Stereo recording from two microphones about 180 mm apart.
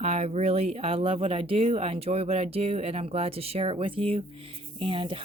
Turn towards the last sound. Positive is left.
turn(degrees=-30)  # may be behind; listen again after turning